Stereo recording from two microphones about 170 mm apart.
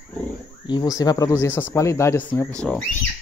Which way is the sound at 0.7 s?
20° left (ahead or behind).